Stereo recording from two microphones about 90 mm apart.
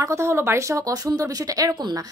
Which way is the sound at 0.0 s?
30° right (ahead or behind).